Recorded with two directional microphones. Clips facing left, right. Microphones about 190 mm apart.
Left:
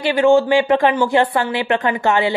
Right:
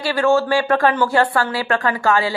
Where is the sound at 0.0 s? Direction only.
15° left (ahead or behind).